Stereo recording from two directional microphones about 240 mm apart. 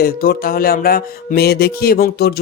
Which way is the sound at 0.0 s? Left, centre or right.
Left.